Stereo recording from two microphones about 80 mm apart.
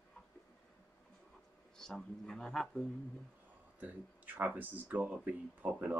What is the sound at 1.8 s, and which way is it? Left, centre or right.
Speech, centre.